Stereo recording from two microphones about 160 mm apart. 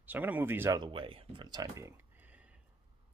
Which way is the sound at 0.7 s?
30° right (ahead or behind).